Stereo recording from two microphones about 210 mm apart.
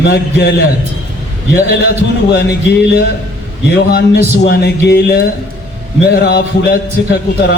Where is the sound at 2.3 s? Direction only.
50° left (ahead or behind).